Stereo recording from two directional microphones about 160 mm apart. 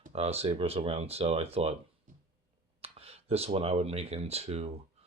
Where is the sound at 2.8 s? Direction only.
40° right (ahead or behind).